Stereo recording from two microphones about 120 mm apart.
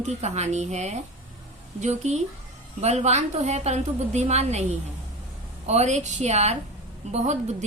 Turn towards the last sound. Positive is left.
turn(degrees=-65)  # may be behind; listen again after turning